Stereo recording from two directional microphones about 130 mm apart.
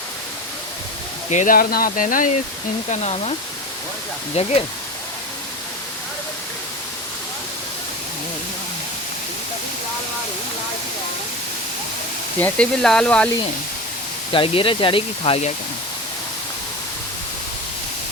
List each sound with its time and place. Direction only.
1.3 s speech: 80° left
2.9 s speech: 55° left (ahead or behind)
4.4 s speech: 55° left (ahead or behind)
12.4 s speech: 15° left (ahead or behind)
14.3 s speech: 45° left (ahead or behind)